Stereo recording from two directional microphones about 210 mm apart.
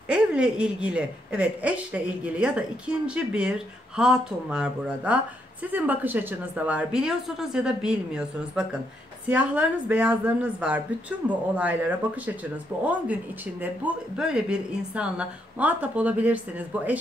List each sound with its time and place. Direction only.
0.1 s a woman's voice: 5° right (ahead or behind)
12.8 s a woman's voice: 5° right (ahead or behind)